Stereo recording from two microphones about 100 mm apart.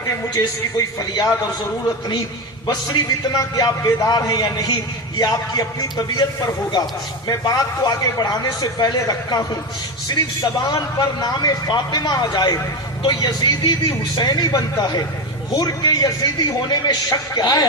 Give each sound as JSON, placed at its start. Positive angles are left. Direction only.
{"t": 0.0, "sound": "a man's voice", "side_deg": 30}
{"t": 2.6, "sound": "a man's voice", "side_deg": 40}